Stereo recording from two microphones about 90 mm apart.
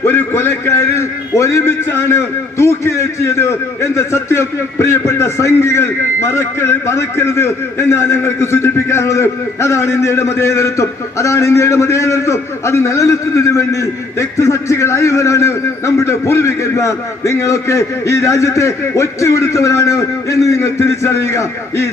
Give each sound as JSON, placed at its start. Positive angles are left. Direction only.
{"t": 0.0, "sound": "a man's voice", "side_deg": 25}